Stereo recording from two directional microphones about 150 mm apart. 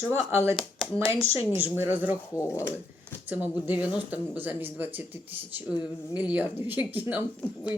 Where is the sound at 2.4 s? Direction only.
20° left (ahead or behind).